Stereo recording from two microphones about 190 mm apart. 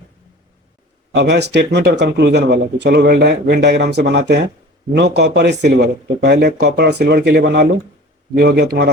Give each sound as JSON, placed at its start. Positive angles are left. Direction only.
{"t": 1.1, "sound": "speech", "side_deg": -65}